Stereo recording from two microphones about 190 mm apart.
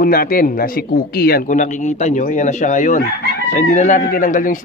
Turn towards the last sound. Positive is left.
turn(degrees=45)  # may be behind; listen again after turning